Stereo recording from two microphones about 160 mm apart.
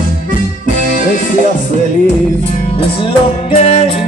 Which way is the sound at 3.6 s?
40° left (ahead or behind).